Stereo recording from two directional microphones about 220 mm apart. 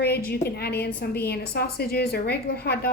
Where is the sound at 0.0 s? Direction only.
45° left (ahead or behind).